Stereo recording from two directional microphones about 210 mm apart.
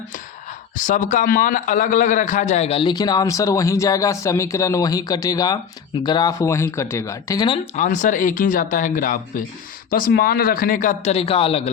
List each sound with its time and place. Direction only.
0.8 s a man's voice: 40° left (ahead or behind)